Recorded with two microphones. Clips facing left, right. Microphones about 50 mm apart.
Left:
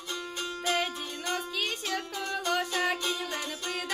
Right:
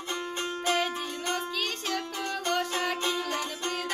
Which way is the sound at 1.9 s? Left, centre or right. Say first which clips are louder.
Right 1 dB; centre.